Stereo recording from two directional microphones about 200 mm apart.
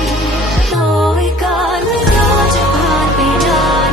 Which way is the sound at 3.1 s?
Centre (ahead or behind).